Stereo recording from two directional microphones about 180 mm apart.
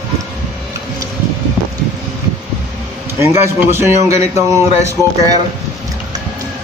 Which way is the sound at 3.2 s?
15° right (ahead or behind).